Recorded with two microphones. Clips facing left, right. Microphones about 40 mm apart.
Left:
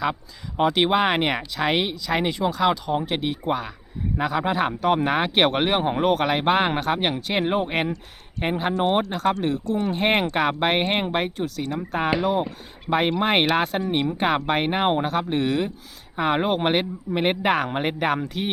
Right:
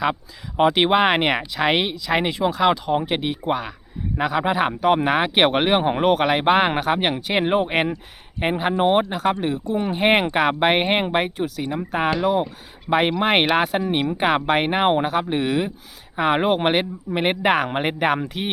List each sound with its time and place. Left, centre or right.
0.6 s speech: centre